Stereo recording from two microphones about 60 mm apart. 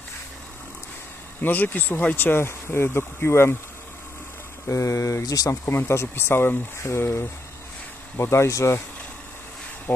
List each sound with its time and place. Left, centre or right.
1.4 s speech: left
4.6 s speech: left
5.2 s speech: left
5.5 s speech: left
9.9 s speech: left